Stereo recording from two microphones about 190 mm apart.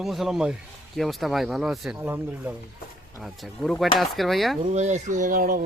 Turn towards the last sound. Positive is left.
turn(degrees=-50)  # may be behind; listen again after turning